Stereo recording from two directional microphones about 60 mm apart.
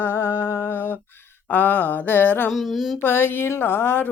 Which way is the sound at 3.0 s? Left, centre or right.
Left.